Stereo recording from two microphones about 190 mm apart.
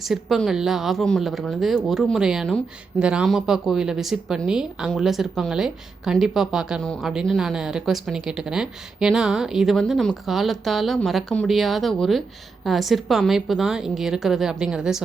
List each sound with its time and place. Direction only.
0.0 s speech: centre (ahead or behind)